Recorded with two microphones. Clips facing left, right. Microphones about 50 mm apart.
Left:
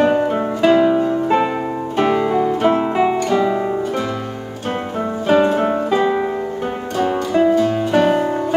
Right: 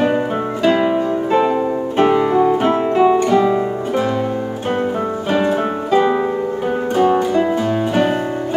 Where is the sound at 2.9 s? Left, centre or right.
Centre.